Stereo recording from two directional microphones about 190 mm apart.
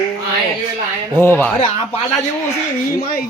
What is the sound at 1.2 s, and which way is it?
Speech, 10° left (ahead or behind).